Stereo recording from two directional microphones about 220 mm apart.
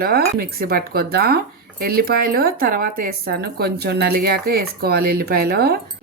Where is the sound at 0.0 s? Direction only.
45° right (ahead or behind).